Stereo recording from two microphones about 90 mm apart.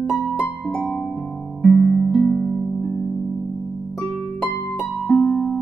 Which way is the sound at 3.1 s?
25° left (ahead or behind).